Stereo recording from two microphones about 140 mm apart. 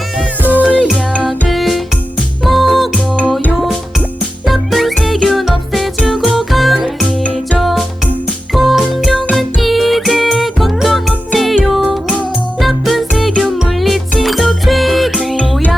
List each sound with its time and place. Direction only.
0.2 s music: 10° right (ahead or behind)
0.8 s music: 5° left (ahead or behind)